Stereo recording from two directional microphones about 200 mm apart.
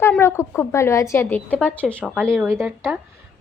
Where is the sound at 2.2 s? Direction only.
10° right (ahead or behind).